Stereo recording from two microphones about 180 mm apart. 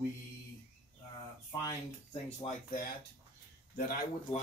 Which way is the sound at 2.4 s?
45° left (ahead or behind).